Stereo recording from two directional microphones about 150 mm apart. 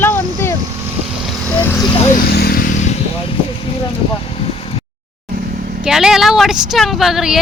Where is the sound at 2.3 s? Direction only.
85° left.